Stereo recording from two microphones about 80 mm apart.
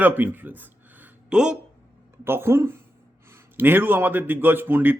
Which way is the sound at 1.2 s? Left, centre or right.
Centre.